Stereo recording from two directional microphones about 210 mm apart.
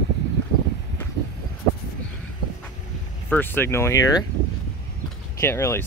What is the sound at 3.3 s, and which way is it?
Speech, 10° left (ahead or behind).